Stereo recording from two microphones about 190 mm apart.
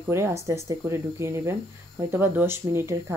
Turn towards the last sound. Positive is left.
turn(degrees=-15)  # may be behind; listen again after turning